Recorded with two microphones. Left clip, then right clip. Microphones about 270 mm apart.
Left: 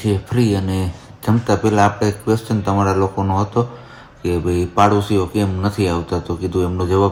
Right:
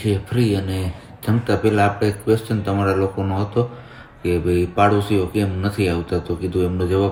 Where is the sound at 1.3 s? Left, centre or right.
Centre.